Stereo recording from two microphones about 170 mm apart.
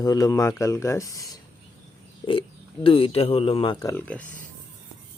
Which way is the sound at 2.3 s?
30° left (ahead or behind).